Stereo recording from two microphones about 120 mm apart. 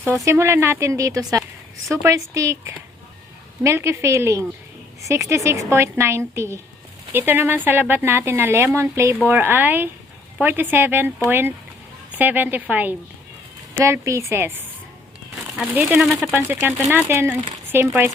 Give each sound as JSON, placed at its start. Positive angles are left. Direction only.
{"t": 0.0, "sound": "speech", "side_deg": -25}
{"t": 15.7, "sound": "speech", "side_deg": -10}